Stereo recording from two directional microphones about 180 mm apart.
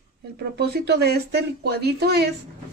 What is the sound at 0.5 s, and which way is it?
Speech, 65° right (ahead or behind).